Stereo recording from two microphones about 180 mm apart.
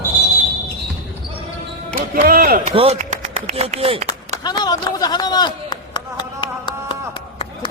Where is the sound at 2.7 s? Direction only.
35° right (ahead or behind).